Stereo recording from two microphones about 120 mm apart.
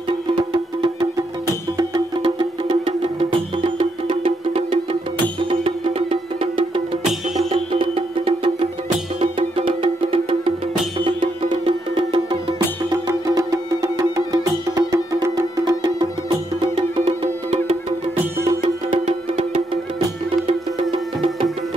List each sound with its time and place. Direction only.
2.2 s music: 45° right (ahead or behind)
12.9 s music: 30° right (ahead or behind); by 17.7 s 50° right (ahead or behind)
18.9 s music: 80° right
20.9 s music: 50° right (ahead or behind)